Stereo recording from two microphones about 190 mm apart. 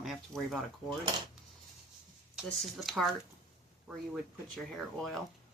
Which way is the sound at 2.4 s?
Centre (ahead or behind).